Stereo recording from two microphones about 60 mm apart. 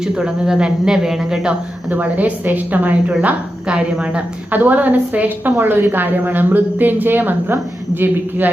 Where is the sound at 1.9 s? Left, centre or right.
Right.